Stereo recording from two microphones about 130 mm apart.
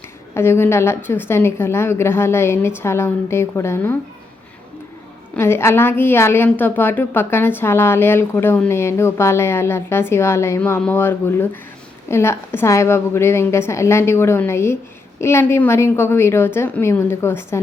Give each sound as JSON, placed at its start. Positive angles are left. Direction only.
{"t": 0.3, "sound": "a woman's voice", "side_deg": 20}
{"t": 5.4, "sound": "a woman's voice", "side_deg": 20}